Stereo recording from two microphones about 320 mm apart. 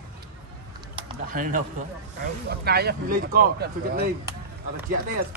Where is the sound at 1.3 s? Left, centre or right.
Right.